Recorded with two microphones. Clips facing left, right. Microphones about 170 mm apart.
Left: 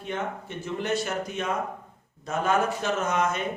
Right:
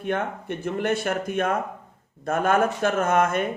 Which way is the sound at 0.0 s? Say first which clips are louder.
Right 5 dB; 55° right (ahead or behind).